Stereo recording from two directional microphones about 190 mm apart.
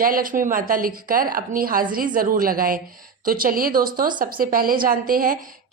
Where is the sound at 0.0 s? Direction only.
45° right (ahead or behind).